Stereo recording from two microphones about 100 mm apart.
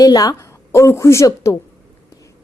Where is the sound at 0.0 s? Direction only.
40° left (ahead or behind).